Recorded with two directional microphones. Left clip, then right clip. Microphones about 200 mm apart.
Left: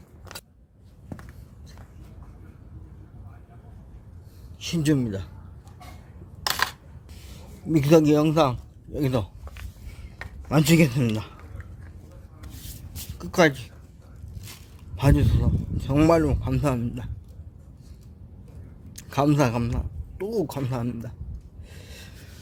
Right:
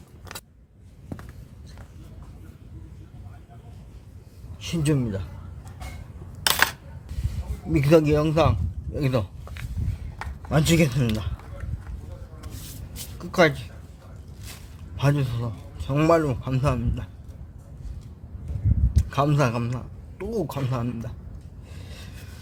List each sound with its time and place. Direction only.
4.6 s a man's voice: 40° left (ahead or behind)
7.7 s a man's voice: 35° left (ahead or behind)
10.5 s a man's voice: 40° left (ahead or behind)
13.1 s a sound: 40° left (ahead or behind)
14.9 s a man's voice: 35° left (ahead or behind)
18.9 s a man's voice: 35° left (ahead or behind)
21.8 s a sound: 40° left (ahead or behind)